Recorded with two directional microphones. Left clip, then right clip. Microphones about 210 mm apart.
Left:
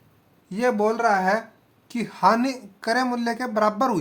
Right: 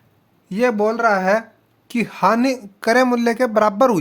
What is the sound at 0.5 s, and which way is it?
Speech, 40° right (ahead or behind).